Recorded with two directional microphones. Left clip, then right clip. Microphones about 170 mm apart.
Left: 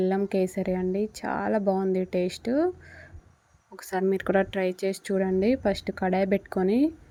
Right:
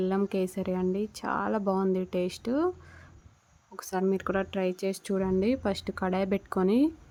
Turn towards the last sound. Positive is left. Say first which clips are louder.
# left 1 dB
turn(degrees=0)  # may be behind; listen again after turning